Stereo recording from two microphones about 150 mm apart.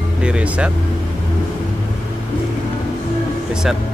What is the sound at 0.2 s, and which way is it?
Speech, 5° right (ahead or behind).